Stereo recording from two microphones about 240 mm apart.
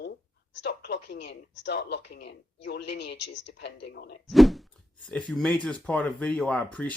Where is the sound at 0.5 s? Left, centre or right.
Left.